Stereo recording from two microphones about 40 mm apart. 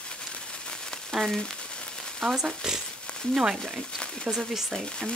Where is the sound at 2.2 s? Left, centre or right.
Centre.